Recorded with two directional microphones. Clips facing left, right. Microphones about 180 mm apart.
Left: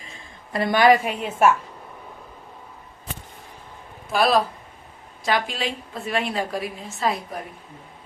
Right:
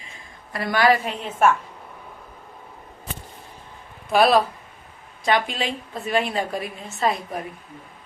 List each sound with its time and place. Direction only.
0.5 s a woman's voice: 25° left (ahead or behind)
4.1 s a woman's voice: centre (ahead or behind)